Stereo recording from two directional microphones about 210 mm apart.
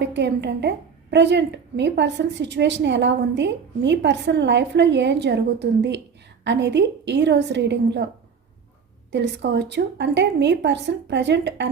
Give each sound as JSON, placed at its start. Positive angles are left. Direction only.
{"t": 0.0, "sound": "a woman's voice", "side_deg": -55}
{"t": 9.1, "sound": "a woman's voice", "side_deg": -55}